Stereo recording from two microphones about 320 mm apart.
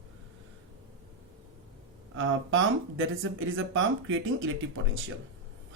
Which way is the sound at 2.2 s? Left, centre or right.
Right.